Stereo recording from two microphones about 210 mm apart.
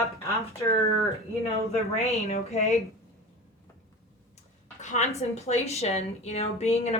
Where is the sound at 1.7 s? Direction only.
30° left (ahead or behind).